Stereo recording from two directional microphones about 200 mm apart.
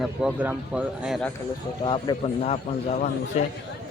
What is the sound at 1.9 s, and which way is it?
Speech, 25° left (ahead or behind).